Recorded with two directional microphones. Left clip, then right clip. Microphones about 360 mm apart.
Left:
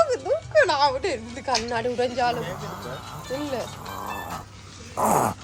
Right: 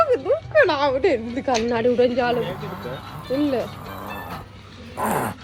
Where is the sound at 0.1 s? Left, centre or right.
Centre.